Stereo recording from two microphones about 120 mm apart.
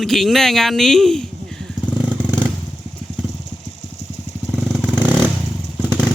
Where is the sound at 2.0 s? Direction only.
15° right (ahead or behind).